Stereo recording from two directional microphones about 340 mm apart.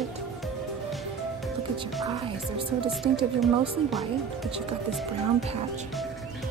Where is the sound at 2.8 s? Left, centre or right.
Centre.